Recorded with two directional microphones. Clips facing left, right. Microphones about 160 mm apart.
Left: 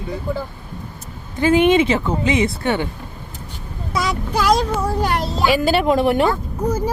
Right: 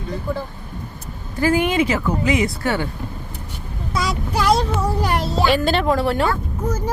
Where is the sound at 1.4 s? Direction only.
20° left (ahead or behind).